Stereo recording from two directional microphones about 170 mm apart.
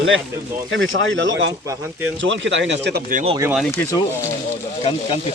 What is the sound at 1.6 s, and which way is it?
Speech, 20° right (ahead or behind).